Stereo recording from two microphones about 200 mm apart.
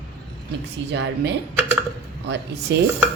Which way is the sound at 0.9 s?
60° right (ahead or behind).